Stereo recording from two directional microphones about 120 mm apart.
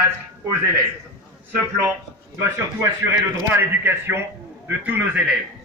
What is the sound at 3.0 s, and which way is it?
A man's voice, 20° right (ahead or behind).